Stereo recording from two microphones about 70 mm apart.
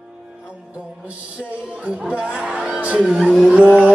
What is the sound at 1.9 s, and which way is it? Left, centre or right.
Speech, centre.